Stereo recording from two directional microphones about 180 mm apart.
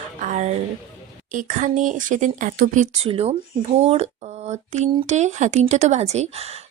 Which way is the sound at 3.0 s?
35° right (ahead or behind).